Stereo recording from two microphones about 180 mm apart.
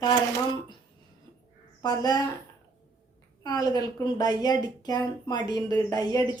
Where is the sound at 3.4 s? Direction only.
20° left (ahead or behind).